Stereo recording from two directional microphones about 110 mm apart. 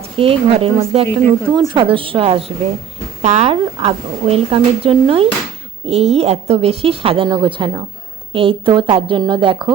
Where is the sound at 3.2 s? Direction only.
80° right.